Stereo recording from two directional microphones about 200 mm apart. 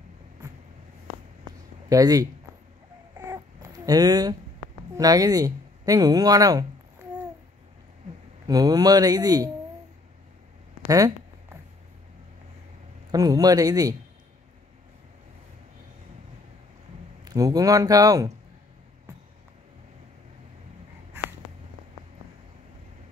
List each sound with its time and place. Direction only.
1.9 s speech: 20° right (ahead or behind)
3.2 s babbling: 20° right (ahead or behind)
4.9 s speech: 20° right (ahead or behind)
8.5 s speech: 20° right (ahead or behind)
10.9 s speech: 15° right (ahead or behind)
13.1 s speech: 20° right (ahead or behind)
17.2 s speech: 20° right (ahead or behind)